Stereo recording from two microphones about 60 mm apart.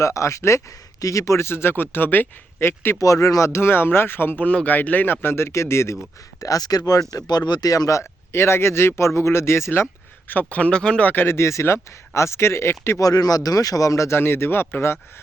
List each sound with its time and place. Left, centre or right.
0.0 s speech: left
1.5 s speech: left
3.0 s speech: left
4.4 s speech: left
6.4 s speech: left
8.3 s speech: left
10.2 s speech: left
11.1 s speech: left
13.0 s a man's voice: left
14.2 s speech: left